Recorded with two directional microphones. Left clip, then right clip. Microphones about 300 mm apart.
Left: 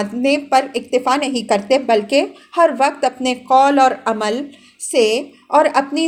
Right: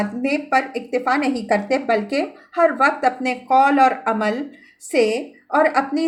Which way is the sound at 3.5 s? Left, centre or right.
Left.